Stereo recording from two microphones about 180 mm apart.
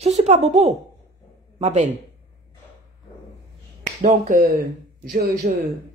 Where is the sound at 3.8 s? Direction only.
45° right (ahead or behind).